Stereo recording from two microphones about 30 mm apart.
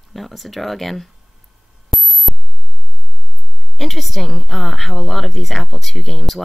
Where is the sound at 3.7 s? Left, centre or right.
Centre.